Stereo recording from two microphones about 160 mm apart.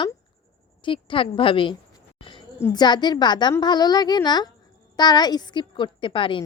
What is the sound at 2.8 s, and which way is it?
A woman's voice, 25° left (ahead or behind).